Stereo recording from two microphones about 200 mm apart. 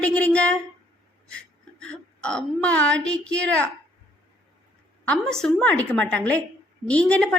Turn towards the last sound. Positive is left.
turn(degrees=5)  # may be behind; listen again after turning